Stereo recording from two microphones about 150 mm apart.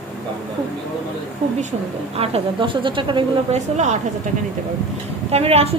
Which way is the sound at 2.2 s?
40° right (ahead or behind).